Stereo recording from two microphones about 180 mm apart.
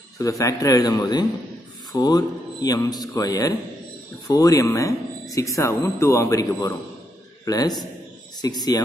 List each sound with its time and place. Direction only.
0.2 s speech: 20° left (ahead or behind)